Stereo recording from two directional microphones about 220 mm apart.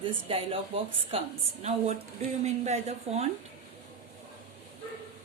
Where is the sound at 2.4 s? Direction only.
30° right (ahead or behind).